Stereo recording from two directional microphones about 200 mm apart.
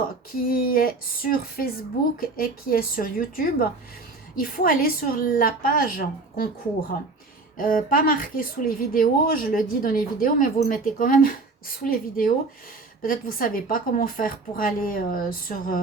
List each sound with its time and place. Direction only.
0.4 s a woman's voice: 45° left (ahead or behind)
7.5 s a woman's voice: 45° left (ahead or behind)